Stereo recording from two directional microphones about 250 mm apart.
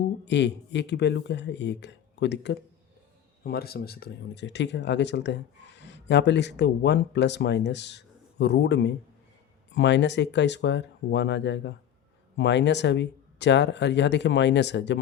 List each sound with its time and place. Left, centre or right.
0.3 s speech: left